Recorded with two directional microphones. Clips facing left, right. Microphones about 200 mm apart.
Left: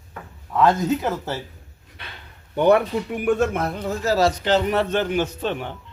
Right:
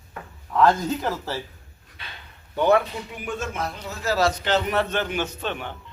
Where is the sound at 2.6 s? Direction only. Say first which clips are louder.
Left 3 dB; 55° left (ahead or behind).